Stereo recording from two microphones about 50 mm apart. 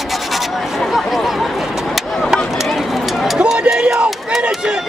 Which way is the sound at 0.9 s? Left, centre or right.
Centre.